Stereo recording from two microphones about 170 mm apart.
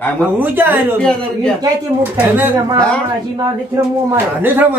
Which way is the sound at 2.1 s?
10° right (ahead or behind).